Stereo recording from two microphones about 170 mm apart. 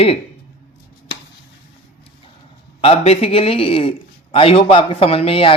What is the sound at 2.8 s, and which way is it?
Speech, 35° left (ahead or behind).